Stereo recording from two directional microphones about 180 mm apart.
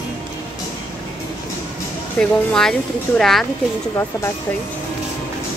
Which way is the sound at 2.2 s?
5° left (ahead or behind).